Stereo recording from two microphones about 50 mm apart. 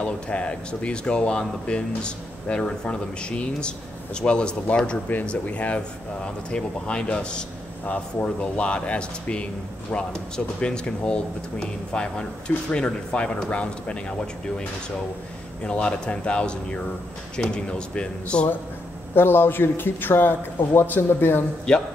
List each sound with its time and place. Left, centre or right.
0.0 s speech: left
15.6 s speech: left
19.1 s speech: left
21.7 s speech: centre